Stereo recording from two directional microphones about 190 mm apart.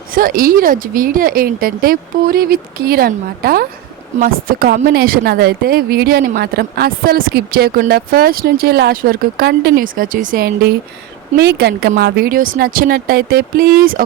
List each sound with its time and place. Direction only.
0.1 s a woman's voice: 50° right (ahead or behind)